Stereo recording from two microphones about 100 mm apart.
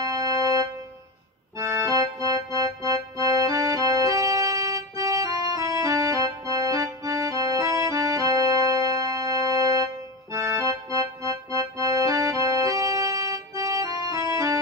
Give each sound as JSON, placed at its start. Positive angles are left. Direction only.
{"t": 0.0, "sound": "music", "side_deg": -40}